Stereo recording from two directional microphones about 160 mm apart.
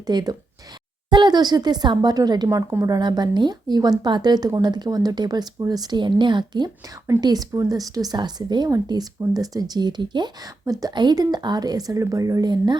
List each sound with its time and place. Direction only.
0.1 s a woman's voice: 25° right (ahead or behind)